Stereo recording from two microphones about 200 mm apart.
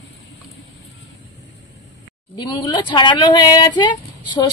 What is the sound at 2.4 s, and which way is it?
A woman's voice, 25° left (ahead or behind).